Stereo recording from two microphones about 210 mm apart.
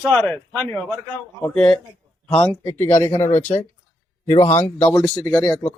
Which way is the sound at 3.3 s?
35° left (ahead or behind).